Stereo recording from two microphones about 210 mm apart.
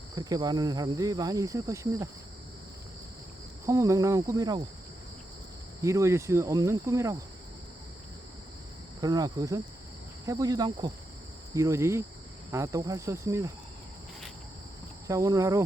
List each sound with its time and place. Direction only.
0.2 s cricket: 20° right (ahead or behind)
3.7 s cricket: 15° right (ahead or behind)
5.8 s cricket: 15° right (ahead or behind)
9.0 s cricket: 20° right (ahead or behind)
15.0 s cricket: 15° right (ahead or behind)